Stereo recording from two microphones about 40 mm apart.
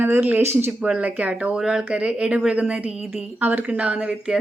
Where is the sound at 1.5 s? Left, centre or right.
Centre.